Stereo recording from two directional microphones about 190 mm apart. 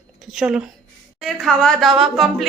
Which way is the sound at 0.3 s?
5° right (ahead or behind).